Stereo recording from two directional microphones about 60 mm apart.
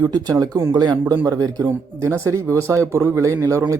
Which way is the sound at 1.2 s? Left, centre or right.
Right.